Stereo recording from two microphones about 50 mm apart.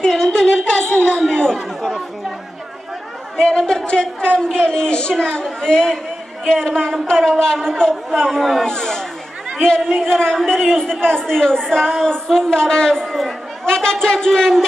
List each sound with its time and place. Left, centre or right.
0.0 s chatter: centre
1.8 s speech: centre
3.3 s a woman's voice: centre
8.3 s speech: centre
8.6 s a woman's voice: centre
10.0 s a woman's voice: centre